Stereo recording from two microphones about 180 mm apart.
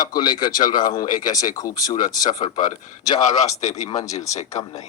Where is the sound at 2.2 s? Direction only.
45° left (ahead or behind).